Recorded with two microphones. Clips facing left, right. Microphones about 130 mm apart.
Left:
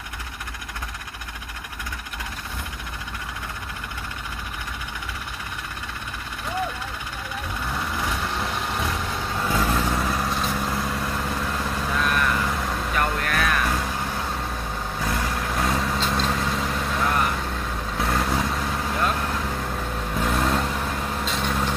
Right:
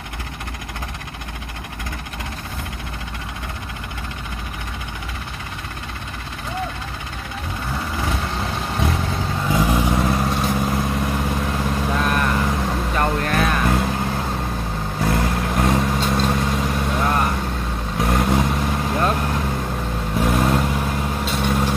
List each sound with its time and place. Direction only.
8.5 s vehicle: 30° right (ahead or behind)
9.5 s vehicle: 15° right (ahead or behind)
11.9 s vehicle: 30° right (ahead or behind)
16.0 s vehicle: 10° right (ahead or behind); by 19.1 s 25° right (ahead or behind)
19.1 s vehicle: 15° right (ahead or behind)